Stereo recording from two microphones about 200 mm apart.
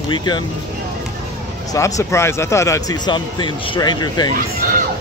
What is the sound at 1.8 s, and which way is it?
A man's voice, 15° left (ahead or behind).